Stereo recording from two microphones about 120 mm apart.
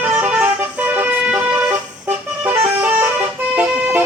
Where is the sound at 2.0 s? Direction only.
20° right (ahead or behind).